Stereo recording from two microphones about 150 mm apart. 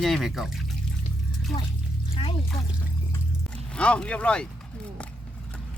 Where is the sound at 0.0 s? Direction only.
Centre (ahead or behind).